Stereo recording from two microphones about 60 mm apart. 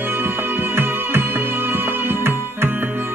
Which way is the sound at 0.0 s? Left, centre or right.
Right.